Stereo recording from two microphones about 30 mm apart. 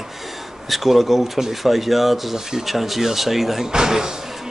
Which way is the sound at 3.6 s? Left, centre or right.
Centre.